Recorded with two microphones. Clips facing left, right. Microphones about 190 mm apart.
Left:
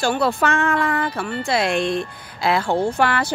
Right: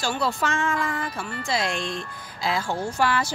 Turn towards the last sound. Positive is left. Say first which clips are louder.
# left 5 dB
turn(degrees=60)  # may be behind; listen again after turning